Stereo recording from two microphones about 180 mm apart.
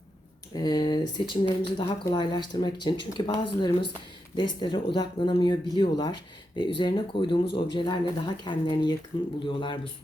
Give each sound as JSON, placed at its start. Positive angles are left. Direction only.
{"t": 0.5, "sound": "speech", "side_deg": 20}